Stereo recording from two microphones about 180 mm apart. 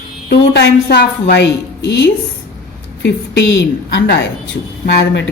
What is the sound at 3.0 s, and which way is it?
A woman's voice, 80° left.